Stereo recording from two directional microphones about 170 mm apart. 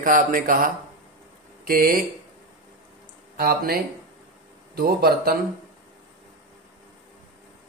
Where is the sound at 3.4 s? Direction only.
60° right (ahead or behind).